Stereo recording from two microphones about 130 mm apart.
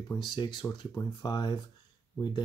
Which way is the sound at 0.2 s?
35° left (ahead or behind).